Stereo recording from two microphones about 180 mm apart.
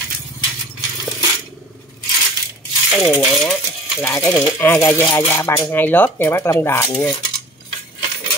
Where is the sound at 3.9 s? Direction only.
15° left (ahead or behind).